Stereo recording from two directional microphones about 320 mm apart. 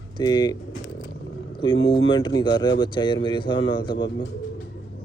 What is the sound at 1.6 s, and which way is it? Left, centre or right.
Speech, centre.